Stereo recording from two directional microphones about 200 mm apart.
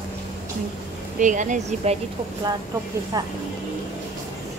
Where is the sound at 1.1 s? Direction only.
40° right (ahead or behind).